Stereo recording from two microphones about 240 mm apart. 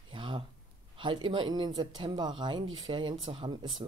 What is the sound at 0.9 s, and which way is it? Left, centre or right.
Speech, right.